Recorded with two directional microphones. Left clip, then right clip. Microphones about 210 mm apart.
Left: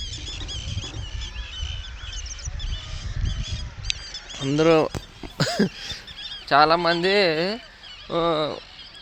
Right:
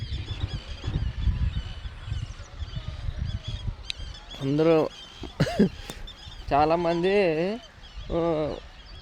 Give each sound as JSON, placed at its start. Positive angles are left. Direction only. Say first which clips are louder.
{"t": 3.9, "sound": "mouse", "louder": "left 7 dB", "side_deg": -10}
{"t": 4.4, "sound": "speech", "louder": "left 3 dB", "side_deg": 10}
{"t": 5.4, "sound": "cough", "louder": "left 2 dB", "side_deg": -20}
{"t": 6.5, "sound": "speech", "louder": "left 5 dB", "side_deg": -5}